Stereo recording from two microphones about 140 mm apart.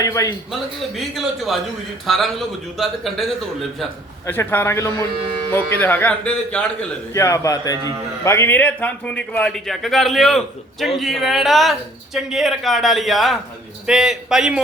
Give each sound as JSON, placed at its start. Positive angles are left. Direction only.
{"t": 0.0, "sound": "speech", "side_deg": 25}
{"t": 0.5, "sound": "a man's voice", "side_deg": 0}
{"t": 4.3, "sound": "speech", "side_deg": 15}
{"t": 7.1, "sound": "a man's voice", "side_deg": 20}